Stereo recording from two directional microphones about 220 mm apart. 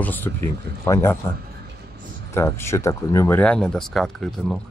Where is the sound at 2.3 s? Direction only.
10° left (ahead or behind).